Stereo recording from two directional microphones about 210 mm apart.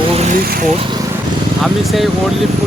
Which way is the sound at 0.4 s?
45° right (ahead or behind).